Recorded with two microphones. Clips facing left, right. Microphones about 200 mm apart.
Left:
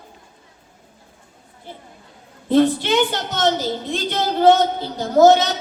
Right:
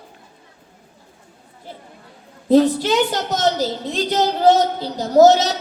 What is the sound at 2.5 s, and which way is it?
A child's voice, 40° right (ahead or behind).